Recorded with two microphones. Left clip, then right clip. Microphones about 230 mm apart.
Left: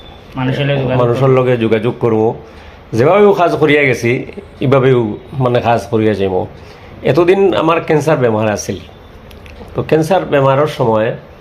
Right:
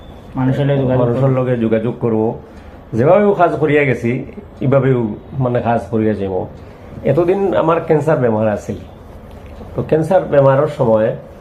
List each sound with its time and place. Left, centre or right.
0.3 s a man's voice: centre
0.9 s speech: left
9.7 s speech: left